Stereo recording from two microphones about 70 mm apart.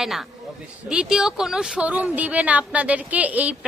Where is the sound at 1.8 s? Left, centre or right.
Right.